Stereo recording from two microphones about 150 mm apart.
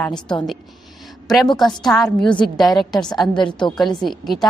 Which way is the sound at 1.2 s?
Centre (ahead or behind).